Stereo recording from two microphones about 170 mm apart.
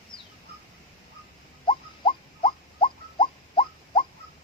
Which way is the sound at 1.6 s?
30° left (ahead or behind).